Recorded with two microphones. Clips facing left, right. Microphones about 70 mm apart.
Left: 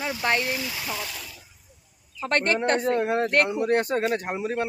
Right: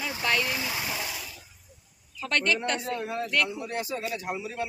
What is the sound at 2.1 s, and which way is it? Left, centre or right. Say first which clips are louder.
Speech: left 3 dB; left.